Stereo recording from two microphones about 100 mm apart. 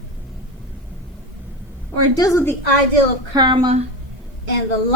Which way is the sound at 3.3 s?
50° right (ahead or behind).